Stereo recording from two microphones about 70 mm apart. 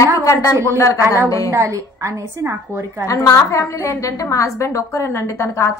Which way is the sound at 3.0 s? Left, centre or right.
Left.